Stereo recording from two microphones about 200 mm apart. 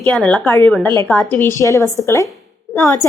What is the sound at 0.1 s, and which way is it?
A woman's voice, 5° left (ahead or behind).